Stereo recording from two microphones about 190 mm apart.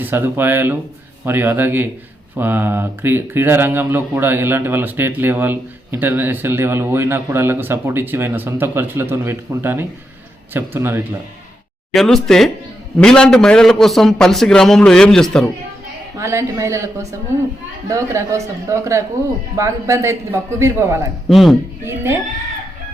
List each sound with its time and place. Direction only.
0.0 s speech: 10° right (ahead or behind)
11.9 s a man's voice: centre (ahead or behind)
16.1 s speech: 15° right (ahead or behind)
21.2 s a man's voice: centre (ahead or behind)
21.8 s speech: 15° right (ahead or behind)